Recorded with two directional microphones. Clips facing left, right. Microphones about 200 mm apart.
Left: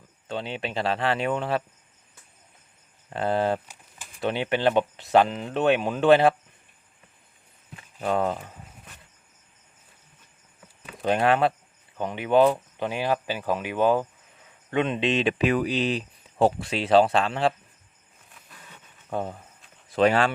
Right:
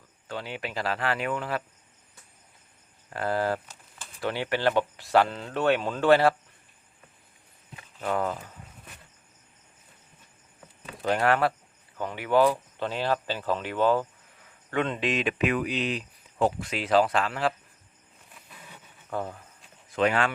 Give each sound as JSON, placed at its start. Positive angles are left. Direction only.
{"t": 0.3, "sound": "speech", "side_deg": 25}
{"t": 3.1, "sound": "speech", "side_deg": 25}
{"t": 8.0, "sound": "speech", "side_deg": 25}
{"t": 11.0, "sound": "speech", "side_deg": 20}
{"t": 18.4, "sound": "vehicle", "side_deg": -10}
{"t": 19.1, "sound": "speech", "side_deg": 20}
{"t": 19.9, "sound": "speech", "side_deg": 30}